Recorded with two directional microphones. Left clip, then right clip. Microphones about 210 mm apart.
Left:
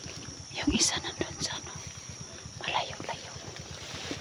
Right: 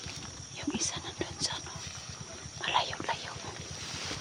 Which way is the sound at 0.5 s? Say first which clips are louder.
Left 7 dB; 25° left (ahead or behind).